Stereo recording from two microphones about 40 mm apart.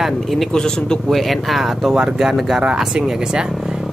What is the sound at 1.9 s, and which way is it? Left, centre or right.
Speech, centre.